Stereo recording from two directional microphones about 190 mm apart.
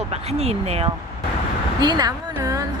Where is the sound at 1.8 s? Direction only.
20° right (ahead or behind).